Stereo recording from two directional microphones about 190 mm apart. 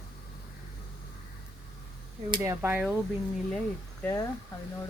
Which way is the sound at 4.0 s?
15° left (ahead or behind).